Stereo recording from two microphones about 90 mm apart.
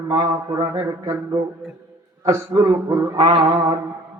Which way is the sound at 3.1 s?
90° right.